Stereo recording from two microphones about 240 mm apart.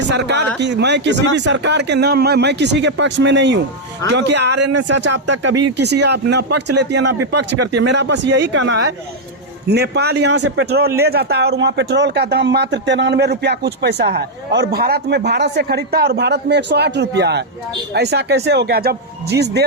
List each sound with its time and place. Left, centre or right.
0.1 s a man's voice: right
4.8 s a man's voice: right
5.3 s a man's voice: right